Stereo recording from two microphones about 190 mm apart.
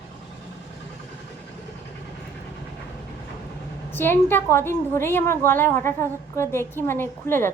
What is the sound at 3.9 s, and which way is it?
A woman's voice, 10° left (ahead or behind).